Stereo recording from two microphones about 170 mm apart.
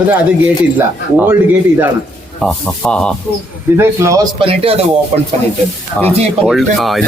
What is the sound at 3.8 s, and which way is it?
Speech, 15° right (ahead or behind).